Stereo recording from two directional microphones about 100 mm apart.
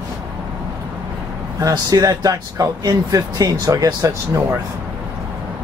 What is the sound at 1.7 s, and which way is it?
Speech, 40° right (ahead or behind).